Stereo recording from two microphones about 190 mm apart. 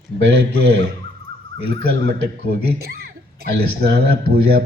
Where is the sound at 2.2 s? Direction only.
55° right (ahead or behind).